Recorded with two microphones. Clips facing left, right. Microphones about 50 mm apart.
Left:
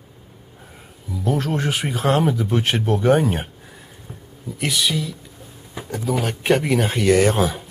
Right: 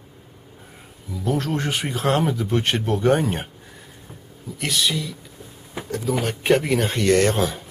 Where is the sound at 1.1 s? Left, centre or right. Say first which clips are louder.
Left 1 dB; centre.